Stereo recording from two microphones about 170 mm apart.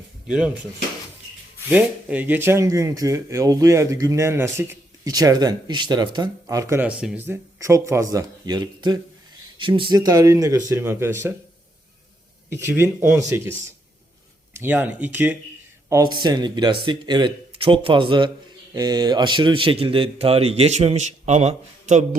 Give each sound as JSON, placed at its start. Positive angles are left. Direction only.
{"t": 0.3, "sound": "speech", "side_deg": -5}
{"t": 1.7, "sound": "speech", "side_deg": -10}
{"t": 7.3, "sound": "speech", "side_deg": -15}
{"t": 12.5, "sound": "speech", "side_deg": -15}
{"t": 14.6, "sound": "speech", "side_deg": -10}
{"t": 15.9, "sound": "speech", "side_deg": -20}